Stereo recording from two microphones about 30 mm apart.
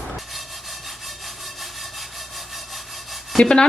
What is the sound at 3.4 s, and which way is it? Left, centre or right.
Speech, left.